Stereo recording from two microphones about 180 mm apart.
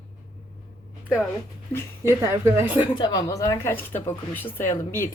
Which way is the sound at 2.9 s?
25° left (ahead or behind).